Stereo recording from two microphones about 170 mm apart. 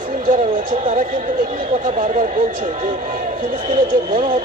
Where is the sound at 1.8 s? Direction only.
55° right (ahead or behind).